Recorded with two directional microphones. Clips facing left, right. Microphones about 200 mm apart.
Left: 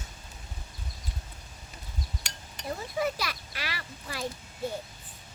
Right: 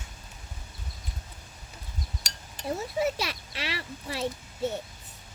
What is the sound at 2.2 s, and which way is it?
Speech, 30° right (ahead or behind).